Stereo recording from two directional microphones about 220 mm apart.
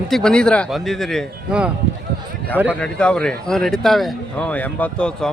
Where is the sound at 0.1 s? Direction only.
5° left (ahead or behind).